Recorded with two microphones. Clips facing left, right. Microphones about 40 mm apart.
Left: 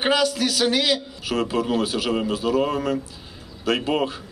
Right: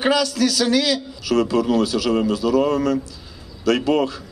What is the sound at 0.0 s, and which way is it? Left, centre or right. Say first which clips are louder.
A man's voice: right 2 dB; left.